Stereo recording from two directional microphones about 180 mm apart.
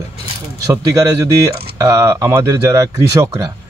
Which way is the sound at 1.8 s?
15° right (ahead or behind).